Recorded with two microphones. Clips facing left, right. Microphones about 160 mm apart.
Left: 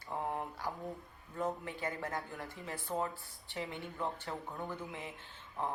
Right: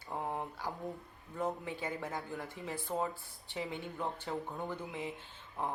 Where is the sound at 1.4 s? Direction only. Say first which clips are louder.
Even; 15° right (ahead or behind).